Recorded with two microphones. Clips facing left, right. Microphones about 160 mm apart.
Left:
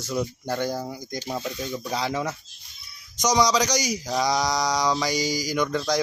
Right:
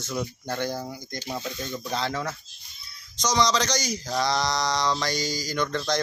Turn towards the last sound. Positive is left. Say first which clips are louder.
# left 3 dB
turn(degrees=10)  # may be behind; listen again after turning